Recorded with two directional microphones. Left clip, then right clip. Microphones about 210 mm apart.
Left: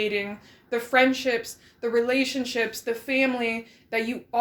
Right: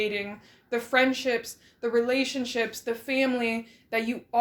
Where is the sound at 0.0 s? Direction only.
10° right (ahead or behind).